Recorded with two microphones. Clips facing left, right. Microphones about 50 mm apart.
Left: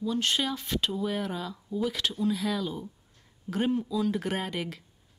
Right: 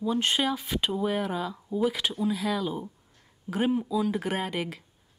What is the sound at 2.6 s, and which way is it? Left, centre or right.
Speech, centre.